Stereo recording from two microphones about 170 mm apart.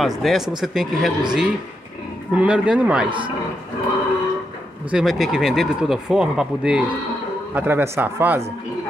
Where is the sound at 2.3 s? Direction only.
5° right (ahead or behind).